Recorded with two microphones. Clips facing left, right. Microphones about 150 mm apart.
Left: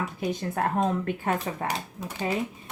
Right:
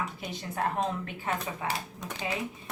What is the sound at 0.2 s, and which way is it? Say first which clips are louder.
Speech: left 5 dB; 50° left (ahead or behind).